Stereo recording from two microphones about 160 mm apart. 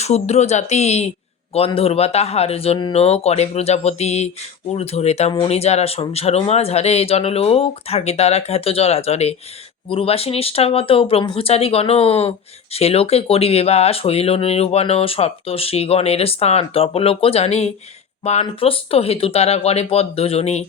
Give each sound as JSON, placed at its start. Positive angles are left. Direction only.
{"t": 0.0, "sound": "speech", "side_deg": 45}